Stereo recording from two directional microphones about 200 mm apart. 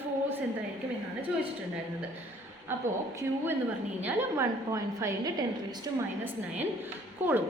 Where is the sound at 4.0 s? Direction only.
10° right (ahead or behind).